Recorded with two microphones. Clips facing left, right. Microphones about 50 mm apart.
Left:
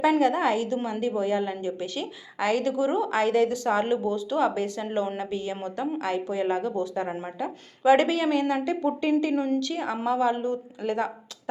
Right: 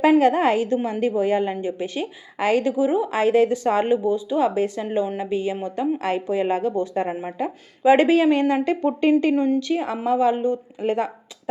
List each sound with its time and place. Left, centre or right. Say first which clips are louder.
0.2 s a woman's voice: right 5 dB; right; by 3.2 s centre
3.2 s a woman's voice: right 5 dB; right
7.1 s a woman's voice: right 5 dB; right
7.3 s speech: right 5 dB; right
9.3 s a woman's voice: right 5 dB; centre
9.6 s a woman's voice: right 5 dB; right